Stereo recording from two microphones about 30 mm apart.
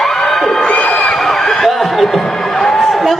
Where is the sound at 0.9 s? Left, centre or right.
Left.